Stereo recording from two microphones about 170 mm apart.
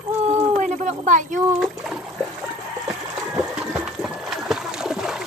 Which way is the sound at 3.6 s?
5° right (ahead or behind).